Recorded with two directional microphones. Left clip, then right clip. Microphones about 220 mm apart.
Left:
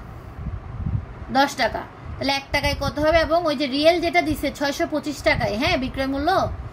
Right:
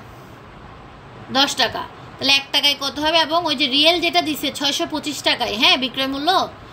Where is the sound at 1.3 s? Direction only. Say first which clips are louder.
Right 2 dB; 30° left (ahead or behind).